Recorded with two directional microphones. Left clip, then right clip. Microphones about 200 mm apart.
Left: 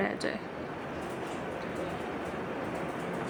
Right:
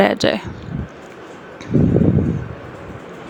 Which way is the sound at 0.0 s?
45° right (ahead or behind).